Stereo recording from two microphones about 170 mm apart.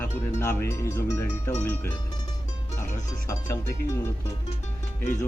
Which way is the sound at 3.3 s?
15° left (ahead or behind).